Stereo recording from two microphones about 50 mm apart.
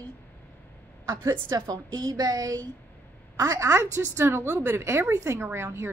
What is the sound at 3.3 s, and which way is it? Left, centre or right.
Speech, right.